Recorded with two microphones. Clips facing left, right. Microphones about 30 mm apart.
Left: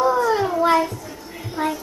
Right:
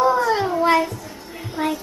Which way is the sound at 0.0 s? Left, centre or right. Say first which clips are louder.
Even; centre.